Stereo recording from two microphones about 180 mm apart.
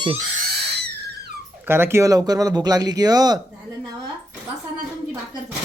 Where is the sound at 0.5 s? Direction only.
65° right (ahead or behind).